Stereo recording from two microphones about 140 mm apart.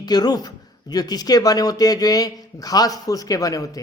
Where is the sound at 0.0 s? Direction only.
30° left (ahead or behind).